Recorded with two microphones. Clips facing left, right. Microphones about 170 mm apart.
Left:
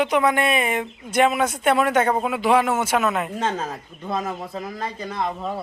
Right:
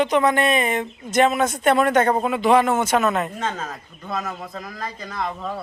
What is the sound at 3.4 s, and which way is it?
A man's voice, 30° left (ahead or behind).